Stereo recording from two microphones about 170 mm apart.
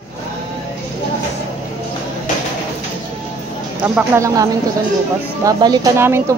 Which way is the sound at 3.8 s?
10° right (ahead or behind).